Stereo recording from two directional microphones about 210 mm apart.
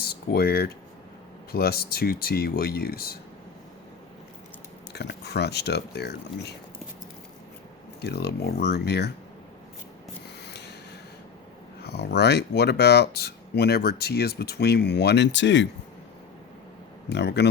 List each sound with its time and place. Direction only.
0.0 s speech: 45° left (ahead or behind)
4.9 s speech: 55° left (ahead or behind)
8.0 s speech: 50° left (ahead or behind)
10.4 s a sound: 55° left (ahead or behind)
11.8 s speech: 50° left (ahead or behind)
17.1 s speech: 55° left (ahead or behind)